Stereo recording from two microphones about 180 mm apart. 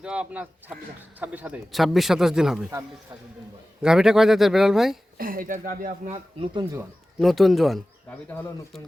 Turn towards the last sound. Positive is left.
turn(degrees=0)  # may be behind; listen again after turning